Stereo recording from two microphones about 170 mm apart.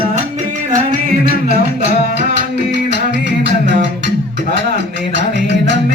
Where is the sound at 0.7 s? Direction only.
60° right (ahead or behind).